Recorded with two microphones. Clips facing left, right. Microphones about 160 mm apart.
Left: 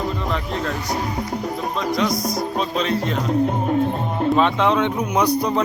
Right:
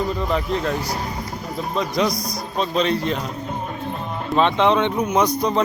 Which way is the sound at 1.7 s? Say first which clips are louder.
Right 1 dB; centre (ahead or behind).